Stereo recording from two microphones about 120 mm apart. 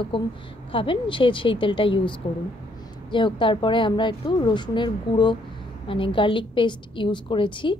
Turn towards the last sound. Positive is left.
turn(degrees=45)  # may be behind; listen again after turning